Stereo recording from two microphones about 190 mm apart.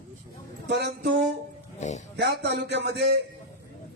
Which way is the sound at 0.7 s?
65° right (ahead or behind).